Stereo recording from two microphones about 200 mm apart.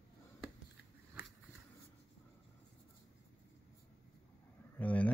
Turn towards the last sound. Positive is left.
turn(degrees=5)  # may be behind; listen again after turning